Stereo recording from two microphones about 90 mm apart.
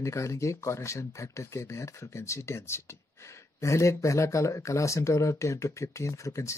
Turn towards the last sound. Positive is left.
turn(degrees=35)  # may be behind; listen again after turning